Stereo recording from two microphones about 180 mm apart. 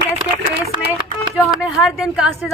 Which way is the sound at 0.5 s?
60° right (ahead or behind).